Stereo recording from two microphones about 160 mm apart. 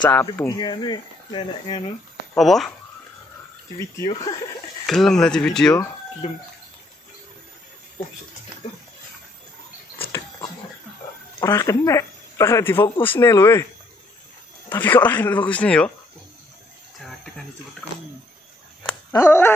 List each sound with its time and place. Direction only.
0.4 s speech: 25° left (ahead or behind)
2.3 s speech: centre (ahead or behind)
4.0 s speech: 25° left (ahead or behind)
4.8 s speech: centre (ahead or behind)
6.2 s speech: 45° left (ahead or behind)
11.4 s speech: 20° left (ahead or behind)
14.7 s speech: 15° left (ahead or behind)
19.1 s speech: 15° left (ahead or behind)